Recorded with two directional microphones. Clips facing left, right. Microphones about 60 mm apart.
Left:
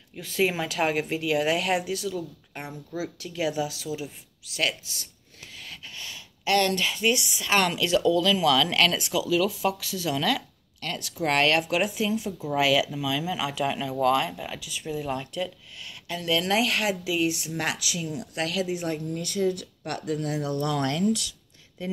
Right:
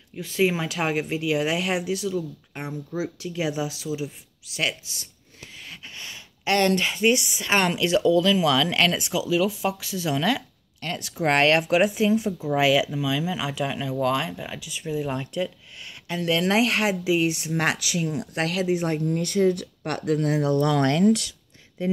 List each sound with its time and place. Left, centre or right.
0.1 s speech: centre
5.6 s speech: centre
12.5 s speech: centre; by 20.5 s right
20.6 s speech: right
21.8 s speech: right